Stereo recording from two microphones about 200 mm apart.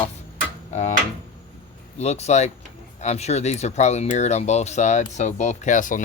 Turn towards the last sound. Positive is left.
turn(degrees=40)  # may be behind; listen again after turning